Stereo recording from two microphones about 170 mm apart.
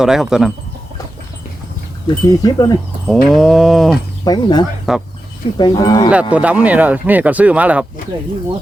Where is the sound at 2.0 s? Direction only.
25° left (ahead or behind).